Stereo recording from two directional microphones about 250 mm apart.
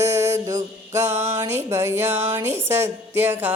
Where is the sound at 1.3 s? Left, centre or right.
Centre.